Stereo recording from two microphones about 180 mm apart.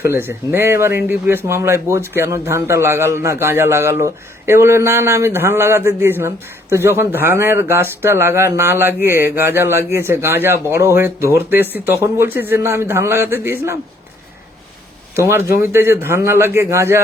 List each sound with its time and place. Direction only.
0.0 s speech: 15° right (ahead or behind)
15.1 s speech: 15° right (ahead or behind)